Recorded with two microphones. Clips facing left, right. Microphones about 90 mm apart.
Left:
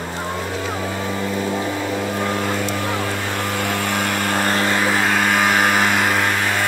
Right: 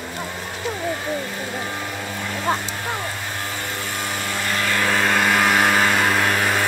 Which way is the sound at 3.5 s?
70° left (ahead or behind).